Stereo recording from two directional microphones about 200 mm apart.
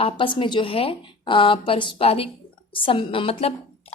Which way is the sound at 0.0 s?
25° left (ahead or behind).